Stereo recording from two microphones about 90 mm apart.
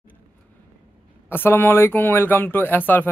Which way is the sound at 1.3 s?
25° left (ahead or behind).